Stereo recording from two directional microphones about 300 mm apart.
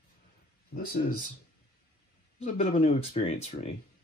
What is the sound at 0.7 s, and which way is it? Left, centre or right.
Speech, left.